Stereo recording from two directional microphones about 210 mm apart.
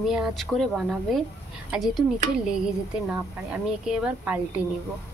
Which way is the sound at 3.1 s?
5° right (ahead or behind).